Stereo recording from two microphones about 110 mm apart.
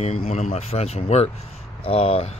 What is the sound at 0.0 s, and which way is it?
Speech, 65° left (ahead or behind).